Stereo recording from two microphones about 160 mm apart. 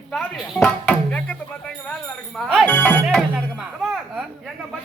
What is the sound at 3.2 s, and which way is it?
Speech, 5° right (ahead or behind).